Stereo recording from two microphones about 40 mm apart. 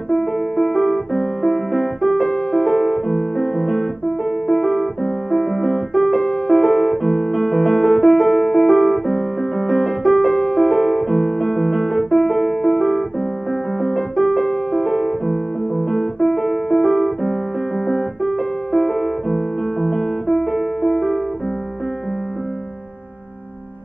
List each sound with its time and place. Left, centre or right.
0.1 s music: centre
2.2 s music: left
2.6 s music: centre
4.5 s piano: centre
7.7 s music: centre
10.3 s music: centre
11.5 s piano: centre
13.5 s music: centre
14.5 s music: left
14.9 s music: centre